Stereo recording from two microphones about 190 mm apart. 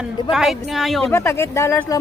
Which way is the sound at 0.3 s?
Centre (ahead or behind).